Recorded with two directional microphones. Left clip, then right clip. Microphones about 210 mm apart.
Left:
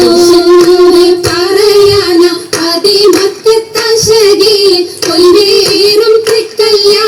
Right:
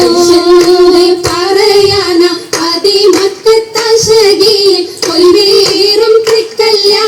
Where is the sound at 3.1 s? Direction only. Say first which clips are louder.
Even; 35° left (ahead or behind).